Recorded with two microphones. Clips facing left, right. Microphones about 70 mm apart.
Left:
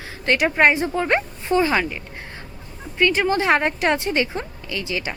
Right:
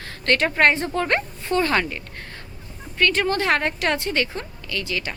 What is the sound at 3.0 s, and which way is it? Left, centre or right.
A woman's voice, centre.